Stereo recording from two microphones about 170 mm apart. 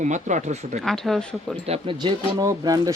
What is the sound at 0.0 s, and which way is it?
Speech, 45° right (ahead or behind).